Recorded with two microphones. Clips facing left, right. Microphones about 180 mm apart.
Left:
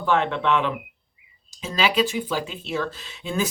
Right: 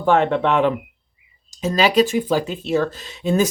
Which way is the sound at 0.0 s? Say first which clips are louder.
Right 5 dB; 45° right (ahead or behind).